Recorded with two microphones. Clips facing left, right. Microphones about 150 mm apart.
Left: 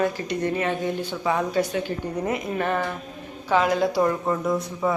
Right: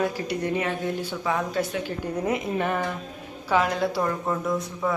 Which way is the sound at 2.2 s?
20° right (ahead or behind).